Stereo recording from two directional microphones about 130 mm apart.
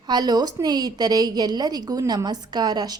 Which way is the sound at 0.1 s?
35° right (ahead or behind).